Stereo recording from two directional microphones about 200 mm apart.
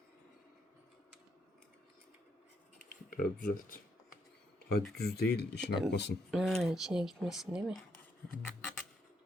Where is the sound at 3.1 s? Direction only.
45° left (ahead or behind).